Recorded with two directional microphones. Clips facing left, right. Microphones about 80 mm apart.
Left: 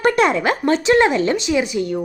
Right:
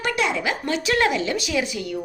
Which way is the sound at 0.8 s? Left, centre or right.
Left.